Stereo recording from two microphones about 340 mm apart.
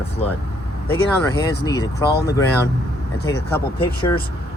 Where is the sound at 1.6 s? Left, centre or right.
Centre.